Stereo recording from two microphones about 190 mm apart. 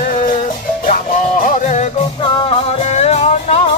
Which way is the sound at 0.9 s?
45° left (ahead or behind).